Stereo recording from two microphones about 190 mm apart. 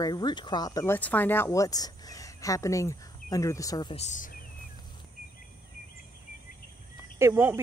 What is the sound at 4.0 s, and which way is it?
Speech, 40° left (ahead or behind).